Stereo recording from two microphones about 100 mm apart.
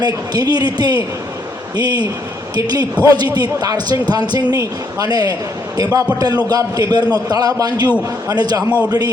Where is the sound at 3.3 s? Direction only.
40° right (ahead or behind).